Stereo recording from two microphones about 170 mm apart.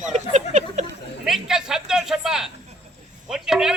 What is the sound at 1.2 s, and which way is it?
A man's voice, centre (ahead or behind).